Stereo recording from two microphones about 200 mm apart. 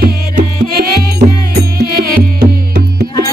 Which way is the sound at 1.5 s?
50° right (ahead or behind).